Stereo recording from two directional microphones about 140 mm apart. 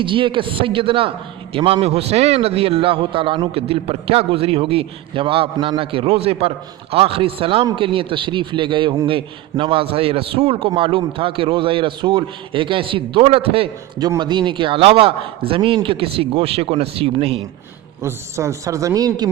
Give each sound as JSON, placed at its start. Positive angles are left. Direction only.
{"t": 0.0, "sound": "a man's voice", "side_deg": -35}
{"t": 18.0, "sound": "a man's voice", "side_deg": -20}